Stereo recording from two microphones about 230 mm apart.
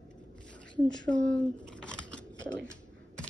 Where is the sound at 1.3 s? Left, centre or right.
Centre.